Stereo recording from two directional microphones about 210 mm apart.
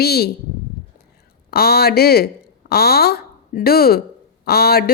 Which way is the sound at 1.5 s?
50° left (ahead or behind).